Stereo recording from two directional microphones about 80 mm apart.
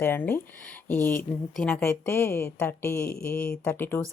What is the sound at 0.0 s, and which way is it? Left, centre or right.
Speech, left.